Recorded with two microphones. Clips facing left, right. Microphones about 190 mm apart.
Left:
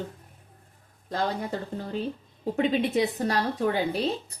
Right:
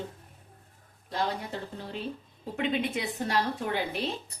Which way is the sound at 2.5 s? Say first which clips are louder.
Left 6 dB; 40° left (ahead or behind).